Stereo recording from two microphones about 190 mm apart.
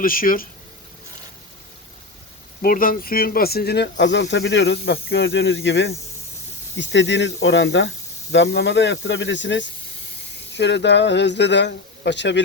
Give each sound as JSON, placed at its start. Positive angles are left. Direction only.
{"t": 0.0, "sound": "speech", "side_deg": 50}
{"t": 2.6, "sound": "speech", "side_deg": 50}